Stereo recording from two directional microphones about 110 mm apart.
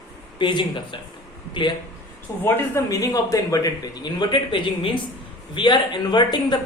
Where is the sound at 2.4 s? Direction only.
20° left (ahead or behind).